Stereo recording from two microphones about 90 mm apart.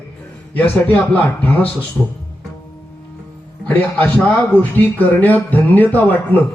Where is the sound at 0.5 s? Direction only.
20° left (ahead or behind).